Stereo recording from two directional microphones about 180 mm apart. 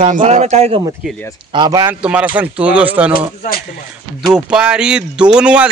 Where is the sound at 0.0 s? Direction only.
45° right (ahead or behind).